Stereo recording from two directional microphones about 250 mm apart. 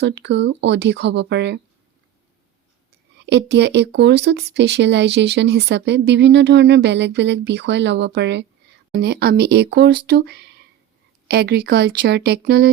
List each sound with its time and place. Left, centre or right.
0.0 s speech: right
3.2 s speech: right